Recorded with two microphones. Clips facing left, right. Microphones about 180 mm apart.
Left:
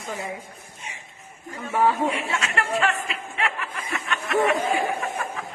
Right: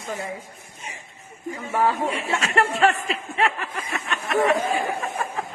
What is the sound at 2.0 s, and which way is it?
Speech, 30° right (ahead or behind).